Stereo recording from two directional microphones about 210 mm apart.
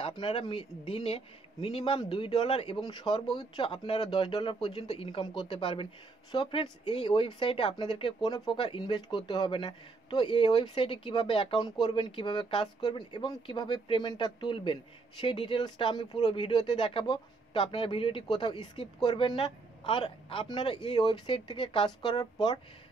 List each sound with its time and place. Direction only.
0.0 s speech: 25° left (ahead or behind)